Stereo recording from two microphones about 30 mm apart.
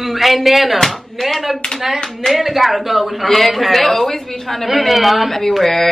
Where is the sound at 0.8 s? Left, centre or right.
Centre.